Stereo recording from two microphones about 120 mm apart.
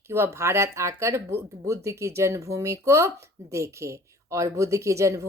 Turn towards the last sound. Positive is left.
turn(degrees=-25)  # may be behind; listen again after turning